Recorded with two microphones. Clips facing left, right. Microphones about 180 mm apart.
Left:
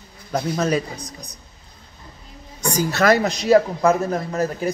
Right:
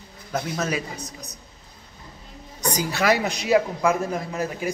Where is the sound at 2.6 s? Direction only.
15° right (ahead or behind).